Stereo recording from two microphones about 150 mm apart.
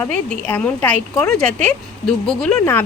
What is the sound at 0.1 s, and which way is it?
Speech, 10° left (ahead or behind).